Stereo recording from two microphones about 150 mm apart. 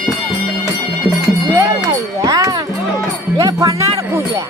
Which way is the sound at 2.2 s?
25° right (ahead or behind).